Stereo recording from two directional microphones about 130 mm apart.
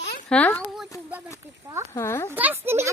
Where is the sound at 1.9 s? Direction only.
20° left (ahead or behind).